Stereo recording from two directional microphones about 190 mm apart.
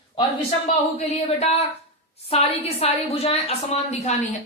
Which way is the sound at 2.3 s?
35° left (ahead or behind).